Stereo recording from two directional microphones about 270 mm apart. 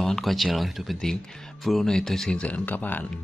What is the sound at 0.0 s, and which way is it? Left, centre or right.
Speech, centre.